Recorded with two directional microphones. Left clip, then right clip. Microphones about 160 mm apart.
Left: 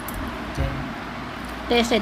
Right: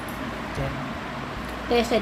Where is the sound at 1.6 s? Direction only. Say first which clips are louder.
Left 2 dB; 25° left (ahead or behind).